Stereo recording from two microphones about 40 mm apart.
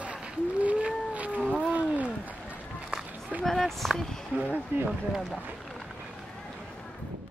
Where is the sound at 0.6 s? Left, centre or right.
Right.